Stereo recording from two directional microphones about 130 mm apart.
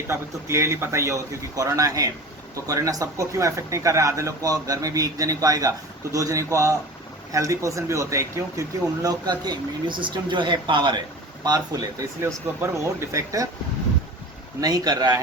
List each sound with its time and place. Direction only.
0.1 s speech: 20° right (ahead or behind)
14.6 s speech: 30° right (ahead or behind)